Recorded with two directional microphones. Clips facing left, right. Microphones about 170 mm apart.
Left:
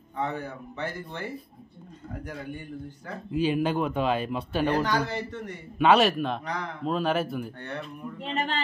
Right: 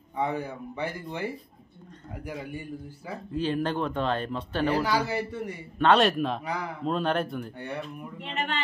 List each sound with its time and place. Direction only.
0.2 s speech: 10° right (ahead or behind)
3.3 s speech: 10° left (ahead or behind)
4.6 s speech: 10° right (ahead or behind)
5.8 s a man's voice: 5° left (ahead or behind)
8.2 s speech: 35° left (ahead or behind)